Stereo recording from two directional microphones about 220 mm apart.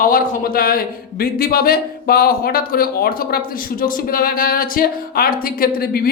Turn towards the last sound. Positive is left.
turn(degrees=45)  # may be behind; listen again after turning